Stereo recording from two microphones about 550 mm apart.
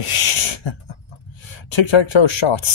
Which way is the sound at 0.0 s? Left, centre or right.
Left.